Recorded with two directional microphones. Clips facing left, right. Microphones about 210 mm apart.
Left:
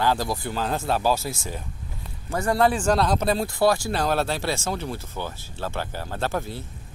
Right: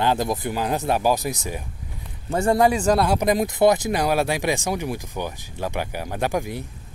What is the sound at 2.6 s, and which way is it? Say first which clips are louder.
Speech: left 1 dB; 10° right (ahead or behind).